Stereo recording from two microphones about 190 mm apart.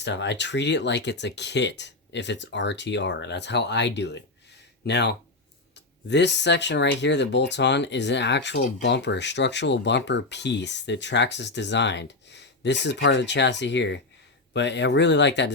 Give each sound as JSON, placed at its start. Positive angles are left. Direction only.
{"t": 0.0, "sound": "speech", "side_deg": 70}